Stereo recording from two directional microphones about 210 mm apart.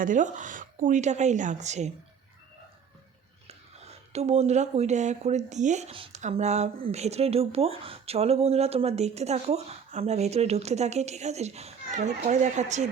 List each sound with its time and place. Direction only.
0.0 s speech: 35° right (ahead or behind)
3.4 s speech: 30° right (ahead or behind)